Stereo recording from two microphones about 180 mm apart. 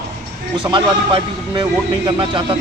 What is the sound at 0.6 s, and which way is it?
Speech, 25° right (ahead or behind).